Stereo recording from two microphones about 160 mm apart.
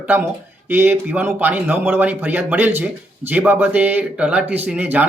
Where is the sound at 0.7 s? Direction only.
15° right (ahead or behind).